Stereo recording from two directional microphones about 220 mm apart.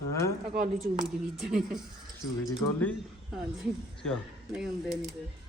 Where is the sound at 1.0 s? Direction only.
Centre (ahead or behind).